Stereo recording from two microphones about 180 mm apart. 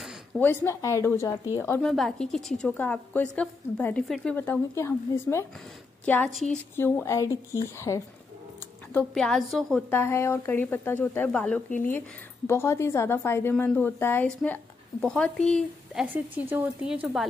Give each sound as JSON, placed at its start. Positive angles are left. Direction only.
{"t": 0.4, "sound": "a woman's voice", "side_deg": 10}
{"t": 1.9, "sound": "a woman's voice", "side_deg": 0}
{"t": 8.9, "sound": "a woman's voice", "side_deg": 5}
{"t": 9.9, "sound": "a woman's voice", "side_deg": 15}